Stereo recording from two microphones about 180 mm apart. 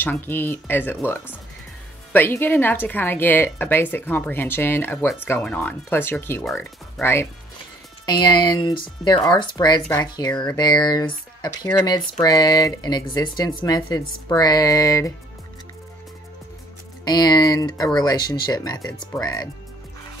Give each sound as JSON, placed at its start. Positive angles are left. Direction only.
{"t": 0.0, "sound": "speech", "side_deg": 10}
{"t": 17.0, "sound": "speech", "side_deg": 20}